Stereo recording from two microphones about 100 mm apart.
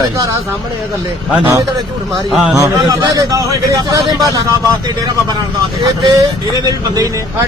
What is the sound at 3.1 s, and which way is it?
Speech, 35° right (ahead or behind).